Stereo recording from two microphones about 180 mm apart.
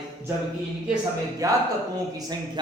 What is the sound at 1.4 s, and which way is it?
Speech, 20° right (ahead or behind).